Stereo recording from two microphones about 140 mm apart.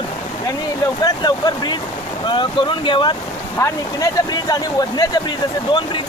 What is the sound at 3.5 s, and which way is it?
Speech, 20° left (ahead or behind).